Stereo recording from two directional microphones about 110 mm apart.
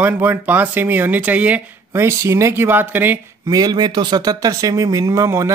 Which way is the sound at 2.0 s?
25° right (ahead or behind).